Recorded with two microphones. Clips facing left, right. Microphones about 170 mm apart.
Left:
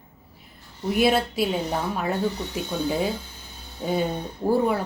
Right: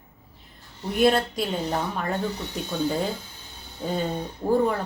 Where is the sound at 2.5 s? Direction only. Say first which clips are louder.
Left 2 dB; 5° left (ahead or behind).